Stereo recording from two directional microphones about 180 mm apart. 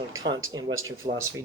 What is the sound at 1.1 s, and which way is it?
Speech, 30° right (ahead or behind).